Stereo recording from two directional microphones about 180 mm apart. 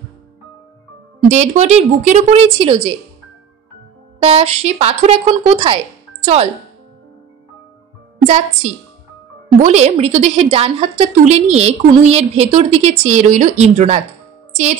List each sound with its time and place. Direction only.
1.3 s a woman's voice: 40° right (ahead or behind)
4.2 s a woman's voice: 35° right (ahead or behind)
9.6 s a woman's voice: 40° right (ahead or behind)